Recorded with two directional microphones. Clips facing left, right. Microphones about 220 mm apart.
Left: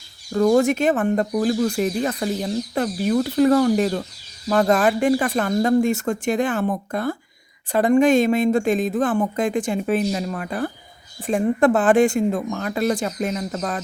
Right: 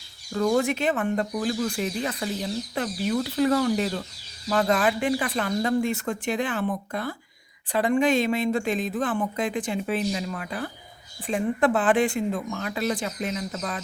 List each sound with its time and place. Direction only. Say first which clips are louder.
0.3 s speech: left 6 dB; 45° left (ahead or behind)